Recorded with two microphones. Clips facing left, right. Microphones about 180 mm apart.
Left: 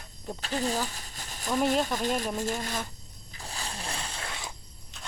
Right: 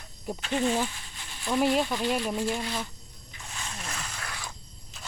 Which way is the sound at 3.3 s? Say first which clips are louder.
Left 2 dB; 35° left (ahead or behind).